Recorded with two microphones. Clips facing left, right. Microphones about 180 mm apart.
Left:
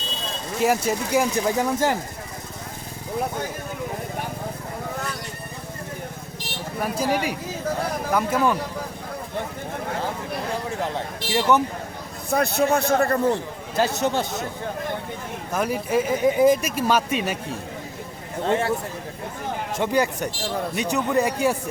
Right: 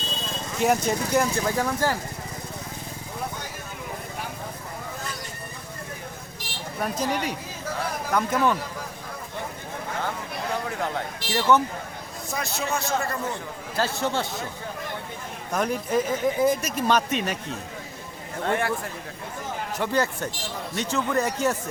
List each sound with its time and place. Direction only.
0.6 s speech: 5° left (ahead or behind)
6.7 s speech: 5° left (ahead or behind)
10.7 s speech: 20° left (ahead or behind)
12.3 s a man's voice: 60° left (ahead or behind)
13.7 s speech: 20° left (ahead or behind)
15.5 s speech: 5° left (ahead or behind)
18.4 s speech: 25° left (ahead or behind)
19.9 s speech: 15° left (ahead or behind)